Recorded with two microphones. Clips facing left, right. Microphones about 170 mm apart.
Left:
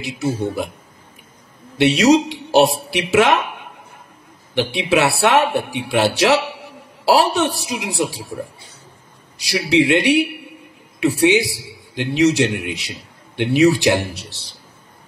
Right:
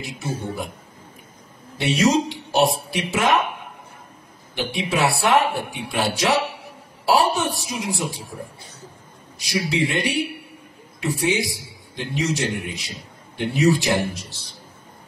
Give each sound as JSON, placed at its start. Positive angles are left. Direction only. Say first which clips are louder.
{"t": 0.0, "sound": "speech", "louder": "left 7 dB", "side_deg": 75}
{"t": 1.8, "sound": "speech", "louder": "left 6 dB", "side_deg": 75}
{"t": 4.6, "sound": "speech", "louder": "left 6 dB", "side_deg": 75}
{"t": 9.4, "sound": "a man's voice", "louder": "left 6 dB", "side_deg": 75}